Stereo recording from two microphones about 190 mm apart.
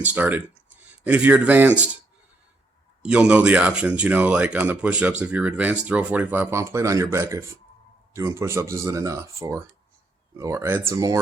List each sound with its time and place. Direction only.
0.0 s speech: 10° right (ahead or behind)
3.0 s speech: 5° right (ahead or behind)